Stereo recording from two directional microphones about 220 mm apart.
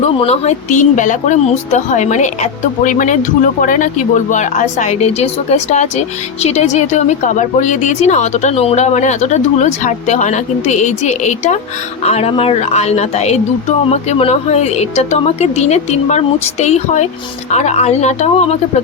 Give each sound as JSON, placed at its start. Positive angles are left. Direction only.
{"t": 0.2, "sound": "a woman's voice", "side_deg": 30}